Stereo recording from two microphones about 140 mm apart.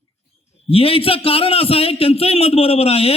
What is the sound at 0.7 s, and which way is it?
Speech, 45° left (ahead or behind).